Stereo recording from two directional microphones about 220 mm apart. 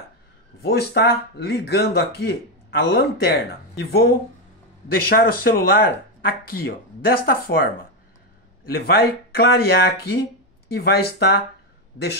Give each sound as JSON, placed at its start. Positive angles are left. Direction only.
{"t": 0.6, "sound": "speech", "side_deg": 45}